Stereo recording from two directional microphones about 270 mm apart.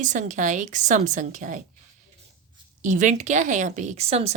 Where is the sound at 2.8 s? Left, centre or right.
Right.